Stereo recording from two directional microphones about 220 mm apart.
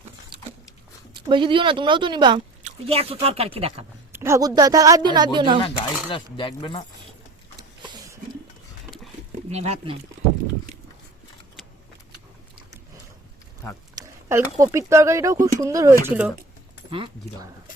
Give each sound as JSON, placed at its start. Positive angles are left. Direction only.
{"t": 1.1, "sound": "speech", "side_deg": -20}
{"t": 4.1, "sound": "a woman's voice", "side_deg": -10}
{"t": 5.6, "sound": "speech", "side_deg": 25}
{"t": 9.5, "sound": "speech", "side_deg": -30}
{"t": 13.9, "sound": "a sound", "side_deg": -10}
{"t": 14.6, "sound": "a woman's voice", "side_deg": -15}